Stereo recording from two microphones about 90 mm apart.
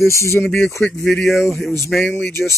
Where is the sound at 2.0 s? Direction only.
25° left (ahead or behind).